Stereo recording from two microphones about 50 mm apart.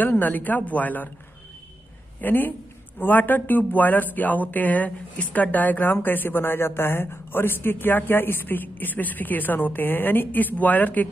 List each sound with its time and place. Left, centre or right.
0.0 s speech: left
2.2 s speech: left